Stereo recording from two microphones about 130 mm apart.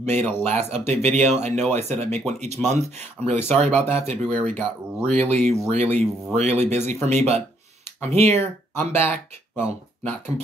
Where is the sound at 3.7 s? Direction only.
15° left (ahead or behind).